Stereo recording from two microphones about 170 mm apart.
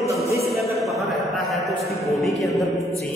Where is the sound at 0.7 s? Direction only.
Centre (ahead or behind).